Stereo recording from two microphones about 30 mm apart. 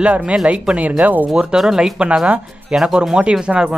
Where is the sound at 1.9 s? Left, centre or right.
Right.